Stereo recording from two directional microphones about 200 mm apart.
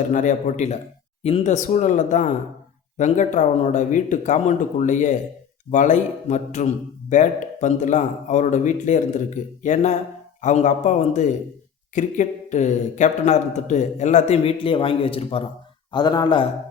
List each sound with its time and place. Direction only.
0.1 s speech: 40° left (ahead or behind); by 16.5 s 25° left (ahead or behind)